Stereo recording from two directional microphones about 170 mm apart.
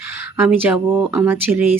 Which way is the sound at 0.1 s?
15° right (ahead or behind).